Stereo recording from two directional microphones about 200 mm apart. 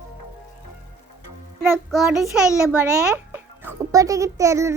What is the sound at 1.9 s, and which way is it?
A child's voice, centre (ahead or behind).